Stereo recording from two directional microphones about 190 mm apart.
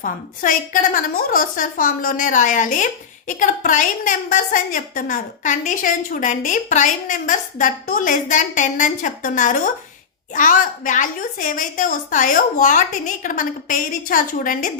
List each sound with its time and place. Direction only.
0.0 s a woman's voice: 45° left (ahead or behind)